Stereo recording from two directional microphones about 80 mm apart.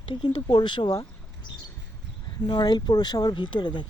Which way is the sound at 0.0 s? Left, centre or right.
Left.